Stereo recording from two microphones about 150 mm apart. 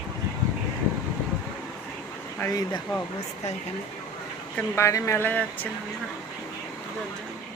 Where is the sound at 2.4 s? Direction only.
25° left (ahead or behind).